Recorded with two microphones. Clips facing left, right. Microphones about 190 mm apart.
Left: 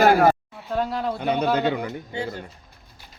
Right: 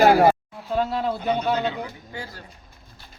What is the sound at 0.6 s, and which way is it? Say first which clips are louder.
Speech: right 1 dB; centre (ahead or behind).